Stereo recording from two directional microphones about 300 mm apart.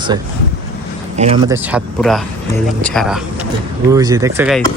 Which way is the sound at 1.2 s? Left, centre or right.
Right.